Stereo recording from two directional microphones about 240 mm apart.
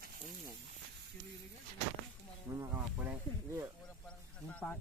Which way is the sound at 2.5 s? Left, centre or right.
Centre.